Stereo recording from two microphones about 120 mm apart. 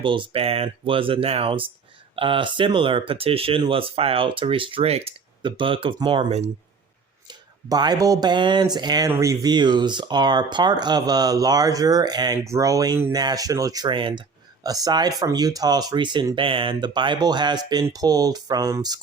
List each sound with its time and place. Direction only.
0.0 s speech: 45° right (ahead or behind)
5.4 s speech: 45° right (ahead or behind)
7.3 s speech: 35° right (ahead or behind)
9.0 s speech: 25° right (ahead or behind)